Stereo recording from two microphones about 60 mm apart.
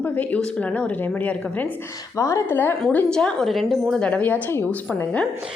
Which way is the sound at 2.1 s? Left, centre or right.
Left.